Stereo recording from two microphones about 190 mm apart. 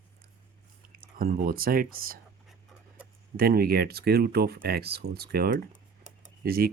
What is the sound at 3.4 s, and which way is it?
Speech, 55° right (ahead or behind).